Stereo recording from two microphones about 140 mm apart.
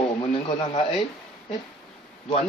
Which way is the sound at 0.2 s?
40° left (ahead or behind).